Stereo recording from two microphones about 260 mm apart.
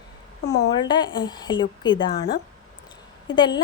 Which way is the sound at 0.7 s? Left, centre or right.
Centre.